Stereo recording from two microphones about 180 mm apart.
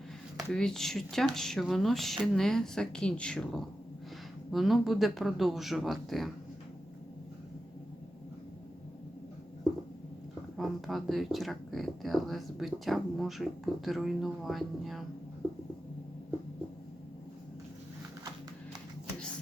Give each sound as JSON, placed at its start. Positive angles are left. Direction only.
{"t": 0.3, "sound": "speech", "side_deg": 5}
{"t": 10.6, "sound": "speech", "side_deg": 0}